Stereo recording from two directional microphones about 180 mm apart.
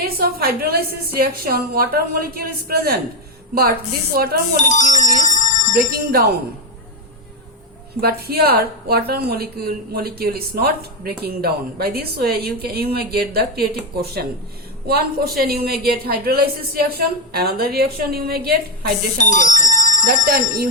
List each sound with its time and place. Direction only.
0.0 s a woman's voice: 55° right (ahead or behind)
4.5 s speech: 40° left (ahead or behind)
5.7 s a woman's voice: 55° right (ahead or behind)
8.0 s a woman's voice: 60° right (ahead or behind)
19.1 s speech: 45° left (ahead or behind)
20.2 s a woman's voice: 55° right (ahead or behind)